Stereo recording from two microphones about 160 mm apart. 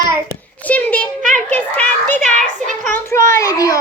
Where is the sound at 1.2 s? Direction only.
55° right (ahead or behind).